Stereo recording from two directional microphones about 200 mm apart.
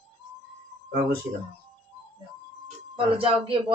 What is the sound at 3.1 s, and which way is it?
Speech, 25° right (ahead or behind).